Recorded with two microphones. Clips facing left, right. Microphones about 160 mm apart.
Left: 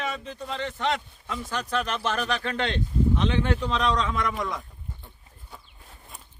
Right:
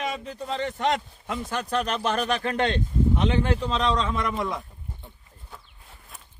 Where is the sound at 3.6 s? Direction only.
30° right (ahead or behind).